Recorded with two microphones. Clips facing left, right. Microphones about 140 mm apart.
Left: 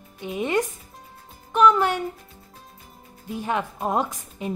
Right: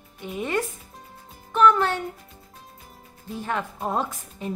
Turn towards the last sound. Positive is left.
turn(degrees=15)  # may be behind; listen again after turning